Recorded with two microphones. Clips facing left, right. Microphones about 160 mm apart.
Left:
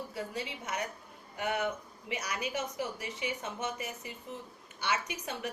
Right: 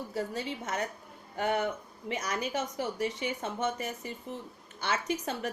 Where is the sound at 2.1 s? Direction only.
45° right (ahead or behind).